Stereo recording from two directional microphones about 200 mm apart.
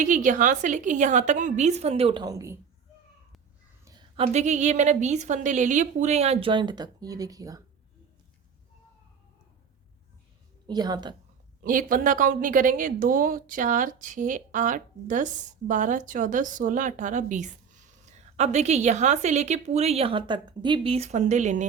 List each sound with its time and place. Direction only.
0.0 s a woman's voice: 40° right (ahead or behind); by 2.6 s 15° right (ahead or behind)
4.2 s a woman's voice: 35° right (ahead or behind); by 7.6 s 15° right (ahead or behind)
10.7 s a woman's voice: 20° right (ahead or behind)
11.6 s a woman's voice: 45° right (ahead or behind)